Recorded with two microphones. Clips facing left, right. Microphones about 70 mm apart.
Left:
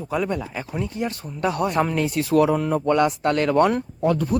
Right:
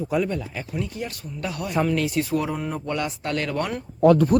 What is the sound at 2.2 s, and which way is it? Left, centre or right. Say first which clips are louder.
Speech: left 6 dB; left.